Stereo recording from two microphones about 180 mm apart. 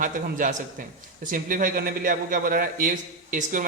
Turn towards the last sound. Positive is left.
turn(degrees=-50)  # may be behind; listen again after turning